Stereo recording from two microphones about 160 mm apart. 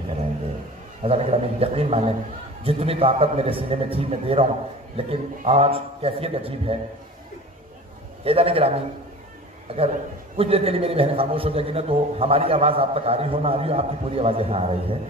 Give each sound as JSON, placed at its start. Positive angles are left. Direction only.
{"t": 1.0, "sound": "a man's voice", "side_deg": -40}
{"t": 8.2, "sound": "a man's voice", "side_deg": -35}
{"t": 9.8, "sound": "a man's voice", "side_deg": -35}